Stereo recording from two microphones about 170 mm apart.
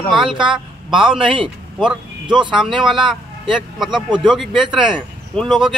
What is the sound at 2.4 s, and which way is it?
Speech, 30° right (ahead or behind).